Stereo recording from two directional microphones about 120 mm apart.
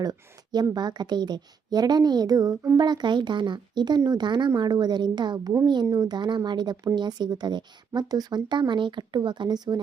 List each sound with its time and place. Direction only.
0.0 s a woman's voice: 35° right (ahead or behind)